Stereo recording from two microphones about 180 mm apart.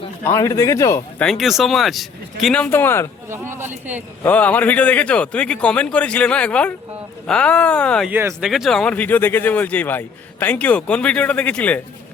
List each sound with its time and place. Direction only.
0.3 s speech: 15° left (ahead or behind)
1.2 s speech: centre (ahead or behind)
3.2 s speech: 15° right (ahead or behind)
4.2 s speech: 10° left (ahead or behind)
8.1 s speech: 15° right (ahead or behind)
8.4 s speech: centre (ahead or behind)